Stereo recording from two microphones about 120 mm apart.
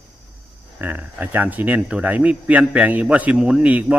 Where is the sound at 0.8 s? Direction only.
15° right (ahead or behind).